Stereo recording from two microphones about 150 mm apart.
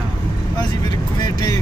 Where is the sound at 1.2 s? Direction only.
25° left (ahead or behind).